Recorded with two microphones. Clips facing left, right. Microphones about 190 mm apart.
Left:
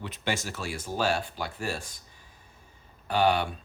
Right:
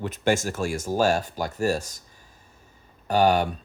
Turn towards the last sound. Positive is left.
turn(degrees=-45)  # may be behind; listen again after turning